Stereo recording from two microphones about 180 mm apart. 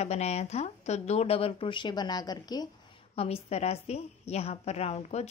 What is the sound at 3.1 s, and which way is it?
Speech, 35° left (ahead or behind).